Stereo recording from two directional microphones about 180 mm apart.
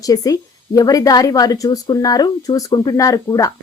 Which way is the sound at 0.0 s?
20° left (ahead or behind).